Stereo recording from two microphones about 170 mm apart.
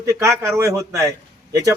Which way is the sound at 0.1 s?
15° right (ahead or behind).